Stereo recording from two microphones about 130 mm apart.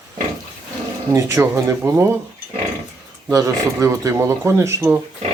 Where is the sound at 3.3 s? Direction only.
25° right (ahead or behind).